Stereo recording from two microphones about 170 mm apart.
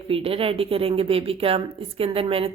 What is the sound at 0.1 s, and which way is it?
A woman's voice, 35° right (ahead or behind).